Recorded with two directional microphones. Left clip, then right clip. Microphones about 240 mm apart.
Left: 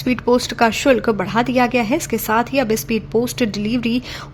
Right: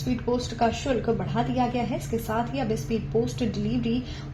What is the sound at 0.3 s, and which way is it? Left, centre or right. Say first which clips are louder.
A woman's voice: left 10 dB; left.